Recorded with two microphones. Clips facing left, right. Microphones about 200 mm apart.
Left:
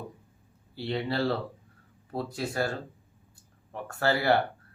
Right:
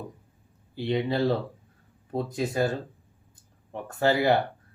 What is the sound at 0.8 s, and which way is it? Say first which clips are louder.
A man's voice: right 4 dB; 15° right (ahead or behind).